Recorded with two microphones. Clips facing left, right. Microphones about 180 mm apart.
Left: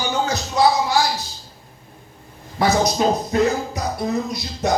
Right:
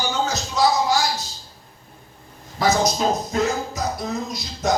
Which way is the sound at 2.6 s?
60° left (ahead or behind).